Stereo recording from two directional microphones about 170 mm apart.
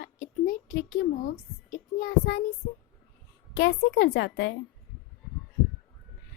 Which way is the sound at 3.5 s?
80° left.